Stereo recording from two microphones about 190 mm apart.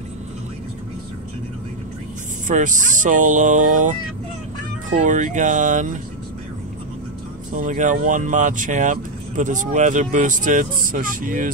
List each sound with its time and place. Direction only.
2.4 s speech: 40° right (ahead or behind)
4.9 s speech: 40° right (ahead or behind)
7.5 s speech: 40° right (ahead or behind)